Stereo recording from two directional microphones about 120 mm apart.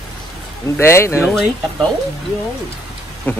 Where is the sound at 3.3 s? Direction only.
15° left (ahead or behind).